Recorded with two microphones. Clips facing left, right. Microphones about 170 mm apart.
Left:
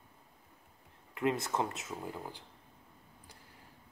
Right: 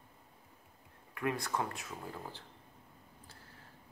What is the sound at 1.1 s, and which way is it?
Speech, 20° left (ahead or behind).